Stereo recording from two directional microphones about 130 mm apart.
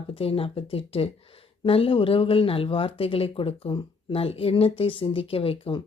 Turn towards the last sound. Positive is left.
turn(degrees=45)  # may be behind; listen again after turning